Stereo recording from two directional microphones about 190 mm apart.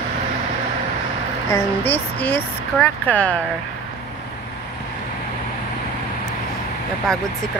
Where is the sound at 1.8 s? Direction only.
10° left (ahead or behind).